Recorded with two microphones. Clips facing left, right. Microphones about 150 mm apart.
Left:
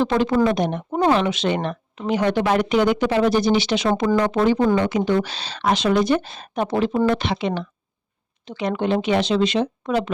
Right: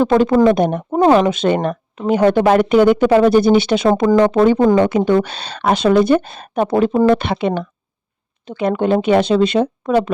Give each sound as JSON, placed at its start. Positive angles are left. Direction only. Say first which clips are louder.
{"t": 0.0, "sound": "speech", "louder": "right 6 dB", "side_deg": -50}